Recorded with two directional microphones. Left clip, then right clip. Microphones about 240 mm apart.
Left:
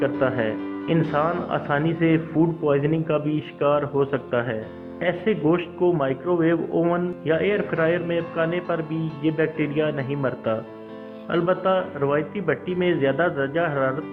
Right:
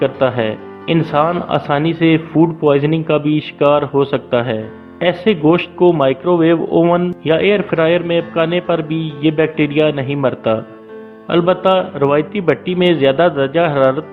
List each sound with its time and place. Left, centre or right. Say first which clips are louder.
0.0 s a man's voice: right 7 dB; right